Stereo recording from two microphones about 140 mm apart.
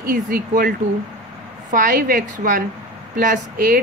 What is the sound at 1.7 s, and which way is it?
A woman's voice, 75° right (ahead or behind).